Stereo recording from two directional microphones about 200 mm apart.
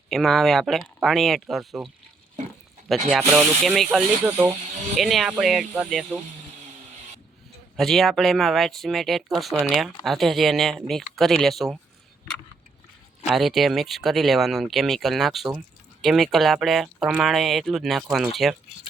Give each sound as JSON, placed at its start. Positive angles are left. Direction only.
{"t": 0.1, "sound": "speech", "side_deg": 0}
{"t": 2.9, "sound": "speech", "side_deg": 0}
{"t": 7.8, "sound": "speech", "side_deg": 0}
{"t": 13.2, "sound": "speech", "side_deg": 0}